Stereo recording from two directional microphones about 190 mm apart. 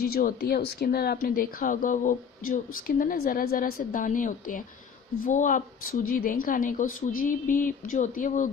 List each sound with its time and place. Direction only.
0.0 s a woman's voice: 50° left (ahead or behind)